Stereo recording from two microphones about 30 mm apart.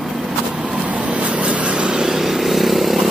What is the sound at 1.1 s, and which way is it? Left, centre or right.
Vehicle, right.